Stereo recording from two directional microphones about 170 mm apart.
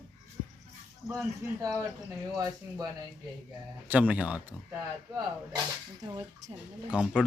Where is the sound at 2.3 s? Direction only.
20° right (ahead or behind).